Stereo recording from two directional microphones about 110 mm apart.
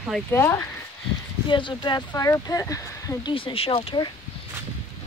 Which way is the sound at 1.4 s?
45° left (ahead or behind).